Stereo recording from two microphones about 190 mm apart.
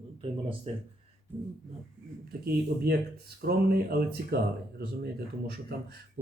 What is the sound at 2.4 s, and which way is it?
Speech, 55° right (ahead or behind).